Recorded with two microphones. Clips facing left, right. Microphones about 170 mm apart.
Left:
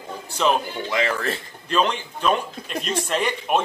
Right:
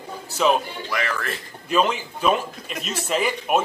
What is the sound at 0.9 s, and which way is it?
Speech, 25° left (ahead or behind).